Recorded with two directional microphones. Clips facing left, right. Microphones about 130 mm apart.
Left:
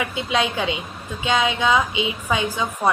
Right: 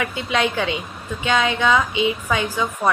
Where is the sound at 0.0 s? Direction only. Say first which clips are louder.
Right 1 dB; 20° left (ahead or behind).